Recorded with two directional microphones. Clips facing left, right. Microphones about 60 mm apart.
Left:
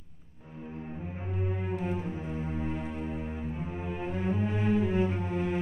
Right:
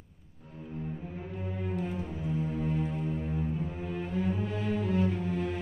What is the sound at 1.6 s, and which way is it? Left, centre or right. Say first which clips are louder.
Cello: right 2 dB; left.